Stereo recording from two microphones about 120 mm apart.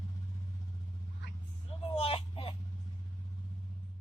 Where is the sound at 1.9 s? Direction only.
50° left (ahead or behind).